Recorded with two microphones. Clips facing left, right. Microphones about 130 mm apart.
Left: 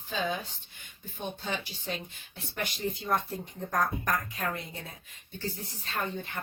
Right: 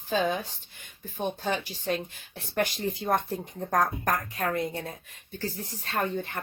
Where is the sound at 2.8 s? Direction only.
60° right (ahead or behind).